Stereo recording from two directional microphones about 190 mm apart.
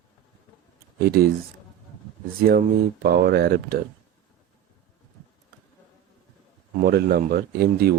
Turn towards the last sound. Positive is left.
turn(degrees=-55)  # may be behind; listen again after turning